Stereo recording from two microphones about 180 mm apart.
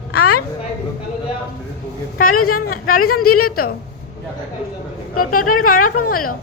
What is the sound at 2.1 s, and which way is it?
Speech, 50° left (ahead or behind).